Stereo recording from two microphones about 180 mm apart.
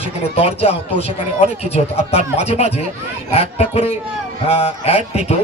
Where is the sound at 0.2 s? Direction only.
35° left (ahead or behind).